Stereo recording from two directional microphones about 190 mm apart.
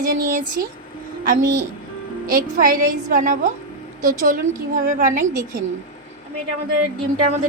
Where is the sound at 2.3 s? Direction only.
50° right (ahead or behind).